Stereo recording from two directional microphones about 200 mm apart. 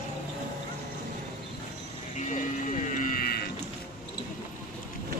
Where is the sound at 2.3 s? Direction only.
40° left (ahead or behind).